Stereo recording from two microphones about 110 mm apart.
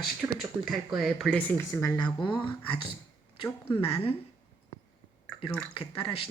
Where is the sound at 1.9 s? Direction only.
45° left (ahead or behind).